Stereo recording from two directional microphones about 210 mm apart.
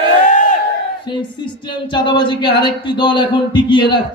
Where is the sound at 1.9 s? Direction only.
20° left (ahead or behind).